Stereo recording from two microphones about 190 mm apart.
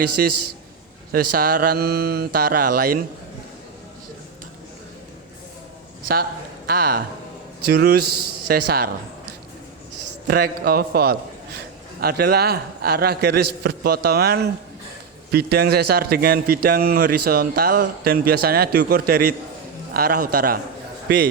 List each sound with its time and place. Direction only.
0.0 s a man's voice: 55° right (ahead or behind)
6.7 s a man's voice: 50° right (ahead or behind)
10.2 s a man's voice: 55° right (ahead or behind)